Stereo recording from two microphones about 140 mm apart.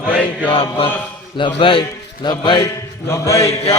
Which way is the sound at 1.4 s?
40° left (ahead or behind).